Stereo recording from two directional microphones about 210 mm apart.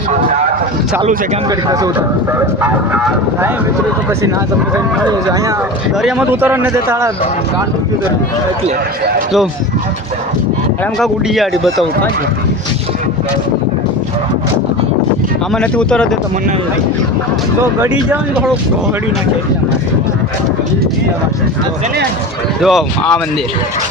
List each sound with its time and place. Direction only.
1.5 s a man's voice: 15° right (ahead or behind)
6.0 s a man's voice: 5° right (ahead or behind)
11.0 s speech: centre (ahead or behind)
15.5 s speech: 5° left (ahead or behind)
17.7 s a man's voice: 10° right (ahead or behind)
22.6 s speech: centre (ahead or behind)